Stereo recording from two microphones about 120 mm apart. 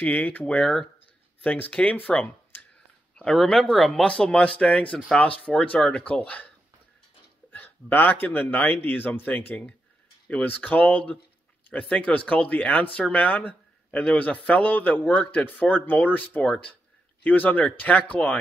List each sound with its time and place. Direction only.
0.0 s a man's voice: 15° left (ahead or behind)
7.5 s a man's voice: 15° left (ahead or behind)